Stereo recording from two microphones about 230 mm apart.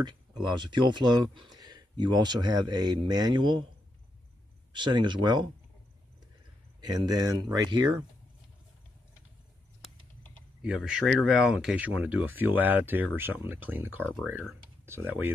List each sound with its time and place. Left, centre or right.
0.4 s speech: centre
4.7 s speech: centre
6.8 s speech: centre
9.8 s a sound: centre
10.6 s speech: centre